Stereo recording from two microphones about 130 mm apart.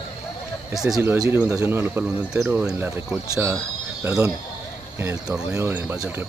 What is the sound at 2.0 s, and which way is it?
Speech, 5° right (ahead or behind).